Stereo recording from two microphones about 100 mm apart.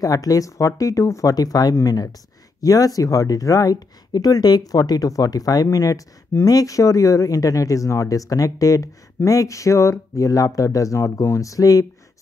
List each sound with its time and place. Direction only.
0.0 s speech: 35° left (ahead or behind)